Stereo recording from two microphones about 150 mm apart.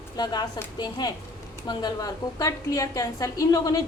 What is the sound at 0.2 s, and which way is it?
A woman's voice, 25° left (ahead or behind).